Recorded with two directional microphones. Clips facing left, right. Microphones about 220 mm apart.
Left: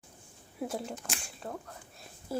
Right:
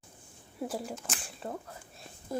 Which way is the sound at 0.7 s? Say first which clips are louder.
Even; 5° right (ahead or behind).